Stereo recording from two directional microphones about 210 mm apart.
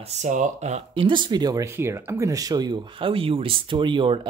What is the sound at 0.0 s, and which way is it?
Speech, 35° right (ahead or behind).